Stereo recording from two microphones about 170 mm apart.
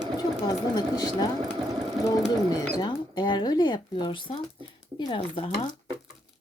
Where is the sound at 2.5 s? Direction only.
25° left (ahead or behind).